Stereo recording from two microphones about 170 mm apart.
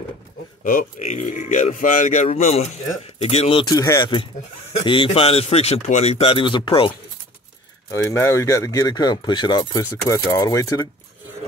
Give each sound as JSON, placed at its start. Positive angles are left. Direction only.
{"t": 0.7, "sound": "a man's voice", "side_deg": 55}
{"t": 3.7, "sound": "speech", "side_deg": 20}
{"t": 4.7, "sound": "a man's voice", "side_deg": 30}
{"t": 7.9, "sound": "speech", "side_deg": 15}